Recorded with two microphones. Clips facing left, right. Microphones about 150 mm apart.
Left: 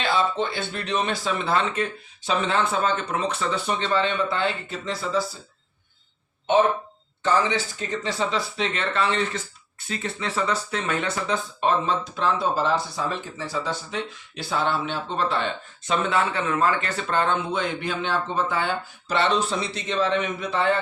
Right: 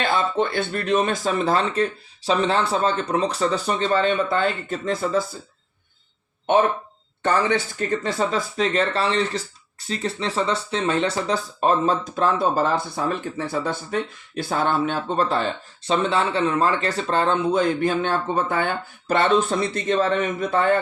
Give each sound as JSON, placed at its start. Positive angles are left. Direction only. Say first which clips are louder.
{"t": 0.0, "sound": "speech", "louder": "right 2 dB", "side_deg": -50}
{"t": 7.2, "sound": "speech", "louder": "right 2 dB", "side_deg": -55}